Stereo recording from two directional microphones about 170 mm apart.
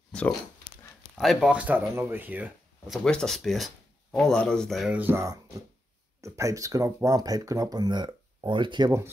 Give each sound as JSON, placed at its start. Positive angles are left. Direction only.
{"t": 0.1, "sound": "a sound", "side_deg": 5}
{"t": 1.1, "sound": "speech", "side_deg": 0}
{"t": 3.0, "sound": "speech", "side_deg": 5}